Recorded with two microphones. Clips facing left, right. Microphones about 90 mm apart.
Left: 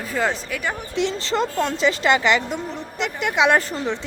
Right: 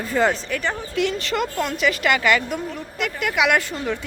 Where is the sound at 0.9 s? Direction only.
25° left (ahead or behind).